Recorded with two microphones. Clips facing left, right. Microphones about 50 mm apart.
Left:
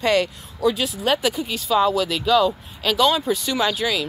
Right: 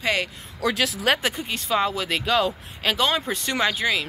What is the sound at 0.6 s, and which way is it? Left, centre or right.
Speech, right.